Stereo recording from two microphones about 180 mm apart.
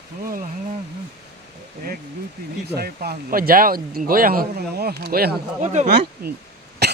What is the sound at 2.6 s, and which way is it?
Speech, 60° right (ahead or behind).